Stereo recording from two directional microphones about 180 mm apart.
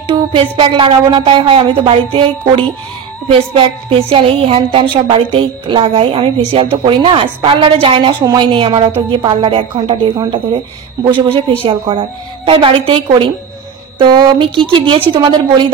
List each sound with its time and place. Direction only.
0.1 s a woman's voice: 30° right (ahead or behind)